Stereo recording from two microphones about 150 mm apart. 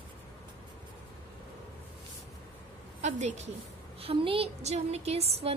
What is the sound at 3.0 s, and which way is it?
Speech, 50° right (ahead or behind).